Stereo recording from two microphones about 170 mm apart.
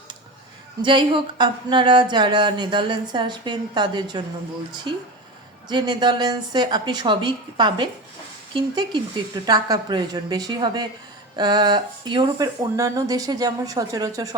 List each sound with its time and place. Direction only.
0.8 s speech: 30° right (ahead or behind)
5.6 s speech: 25° right (ahead or behind)